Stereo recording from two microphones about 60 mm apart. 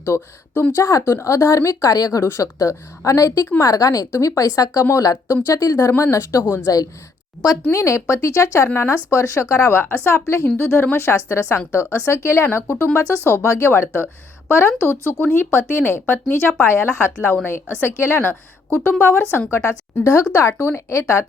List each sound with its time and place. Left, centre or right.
0.0 s speech: left
0.8 s a woman's voice: left
1.0 s speech: left
2.4 s a woman's voice: left
3.6 s a woman's voice: left
4.1 s a woman's voice: left
6.0 s speech: left
6.7 s a woman's voice: left
7.7 s speech: left